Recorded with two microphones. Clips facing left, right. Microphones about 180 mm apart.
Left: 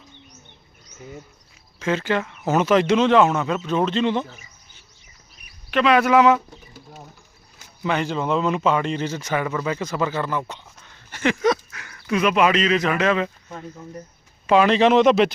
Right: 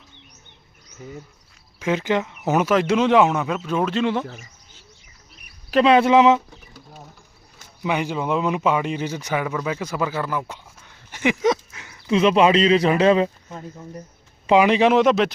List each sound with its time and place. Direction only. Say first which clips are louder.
1.8 s a man's voice: right 1 dB; 15° right (ahead or behind)
5.7 s speech: right 2 dB; 30° right (ahead or behind)
7.9 s a man's voice: even; 10° right (ahead or behind); by 13.3 s 35° right (ahead or behind)
14.5 s a man's voice: even; 10° right (ahead or behind)